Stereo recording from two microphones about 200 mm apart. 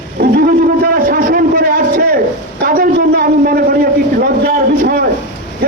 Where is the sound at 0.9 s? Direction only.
45° right (ahead or behind).